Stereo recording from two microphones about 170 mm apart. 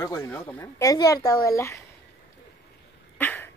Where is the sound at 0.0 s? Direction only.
15° left (ahead or behind).